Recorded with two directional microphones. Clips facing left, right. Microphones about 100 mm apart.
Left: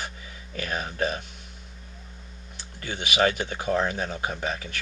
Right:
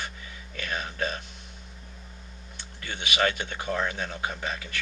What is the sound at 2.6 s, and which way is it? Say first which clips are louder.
Speech: left 3 dB; 5° left (ahead or behind).